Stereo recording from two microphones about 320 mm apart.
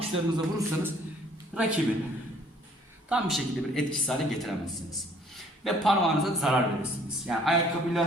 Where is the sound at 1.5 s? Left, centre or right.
Centre.